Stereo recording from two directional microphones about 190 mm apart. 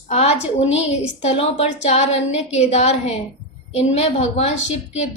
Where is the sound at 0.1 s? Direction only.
35° left (ahead or behind).